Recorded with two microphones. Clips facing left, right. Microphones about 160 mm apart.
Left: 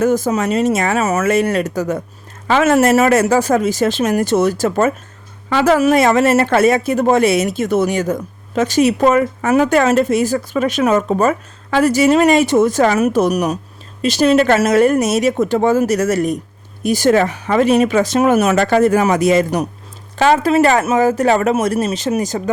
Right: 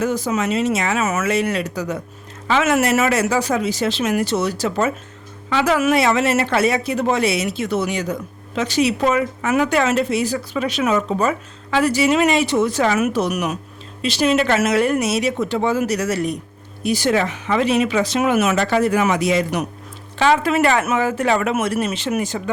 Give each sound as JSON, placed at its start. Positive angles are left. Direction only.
{"t": 0.0, "sound": "speech", "side_deg": 45}